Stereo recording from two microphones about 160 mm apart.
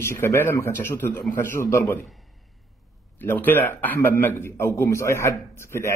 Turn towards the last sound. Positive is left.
turn(degrees=15)  # may be behind; listen again after turning